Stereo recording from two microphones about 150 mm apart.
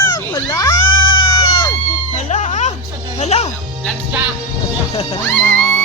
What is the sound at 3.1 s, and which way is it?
Speech, 45° left (ahead or behind).